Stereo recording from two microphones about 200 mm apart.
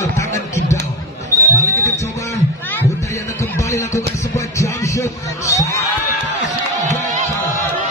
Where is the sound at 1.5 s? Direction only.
15° left (ahead or behind).